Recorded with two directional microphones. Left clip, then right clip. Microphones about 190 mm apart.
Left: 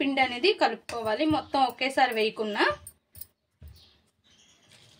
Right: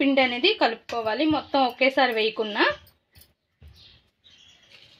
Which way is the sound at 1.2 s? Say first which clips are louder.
Right 2 dB; 15° right (ahead or behind).